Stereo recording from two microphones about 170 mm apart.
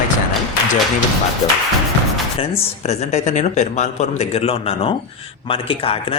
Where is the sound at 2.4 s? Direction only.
35° left (ahead or behind).